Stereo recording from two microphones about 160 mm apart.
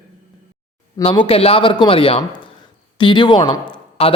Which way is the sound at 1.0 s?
35° left (ahead or behind).